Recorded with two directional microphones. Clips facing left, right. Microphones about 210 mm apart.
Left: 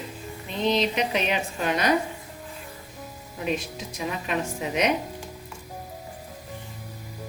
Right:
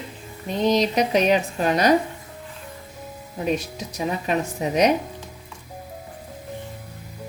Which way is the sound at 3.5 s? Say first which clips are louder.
Right 4 dB; 40° right (ahead or behind).